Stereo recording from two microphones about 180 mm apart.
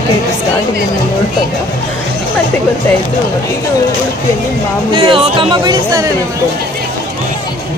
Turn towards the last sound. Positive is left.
turn(degrees=-20)  # may be behind; listen again after turning